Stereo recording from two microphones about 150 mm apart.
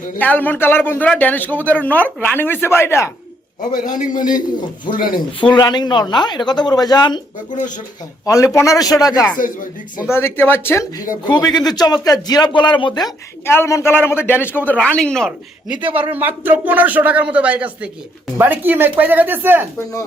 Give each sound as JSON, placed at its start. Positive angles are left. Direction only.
{"t": 0.2, "sound": "a man's voice", "side_deg": 10}
{"t": 3.6, "sound": "a man's voice", "side_deg": 60}
{"t": 5.5, "sound": "speech", "side_deg": 30}
{"t": 8.2, "sound": "a man's voice", "side_deg": 20}
{"t": 15.9, "sound": "speech", "side_deg": -10}